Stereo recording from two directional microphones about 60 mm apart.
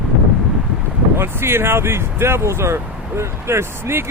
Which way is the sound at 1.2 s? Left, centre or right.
Right.